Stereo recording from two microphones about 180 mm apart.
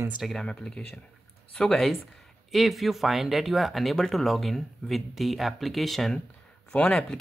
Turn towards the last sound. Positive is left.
turn(degrees=5)  # may be behind; listen again after turning